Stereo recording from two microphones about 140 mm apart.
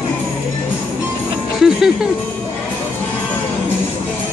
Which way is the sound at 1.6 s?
Centre (ahead or behind).